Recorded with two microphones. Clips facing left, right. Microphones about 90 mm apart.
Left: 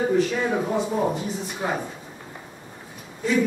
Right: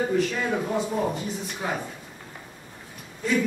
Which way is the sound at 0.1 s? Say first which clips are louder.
Left 3 dB; 5° left (ahead or behind).